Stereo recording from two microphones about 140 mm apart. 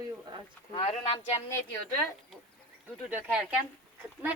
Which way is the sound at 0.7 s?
45° left (ahead or behind).